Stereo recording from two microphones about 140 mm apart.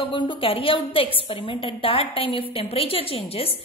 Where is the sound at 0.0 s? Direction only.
35° left (ahead or behind).